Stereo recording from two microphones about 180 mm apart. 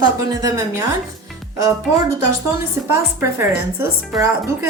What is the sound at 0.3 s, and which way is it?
Speech, 20° right (ahead or behind).